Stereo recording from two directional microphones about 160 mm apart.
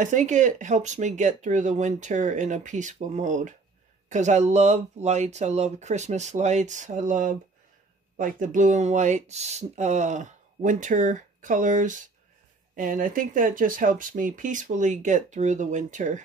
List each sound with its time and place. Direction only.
0.0 s speech: 50° right (ahead or behind)